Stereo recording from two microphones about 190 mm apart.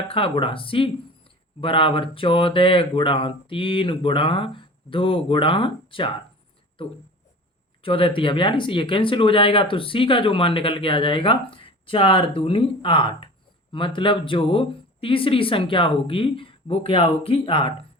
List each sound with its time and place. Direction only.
0.1 s speech: 30° left (ahead or behind)